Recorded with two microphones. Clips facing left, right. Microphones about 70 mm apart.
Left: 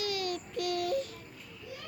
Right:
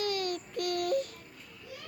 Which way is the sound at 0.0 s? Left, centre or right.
Right.